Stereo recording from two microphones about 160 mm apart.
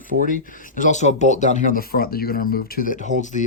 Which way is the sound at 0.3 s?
55° left (ahead or behind).